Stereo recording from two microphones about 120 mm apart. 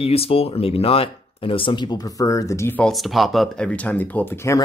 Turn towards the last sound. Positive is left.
turn(degrees=20)  # may be behind; listen again after turning